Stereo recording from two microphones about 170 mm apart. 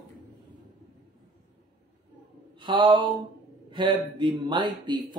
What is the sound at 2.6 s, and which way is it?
A man's voice, 30° right (ahead or behind).